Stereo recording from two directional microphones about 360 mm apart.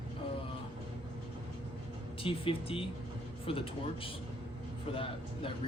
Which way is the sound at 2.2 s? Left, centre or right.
Centre.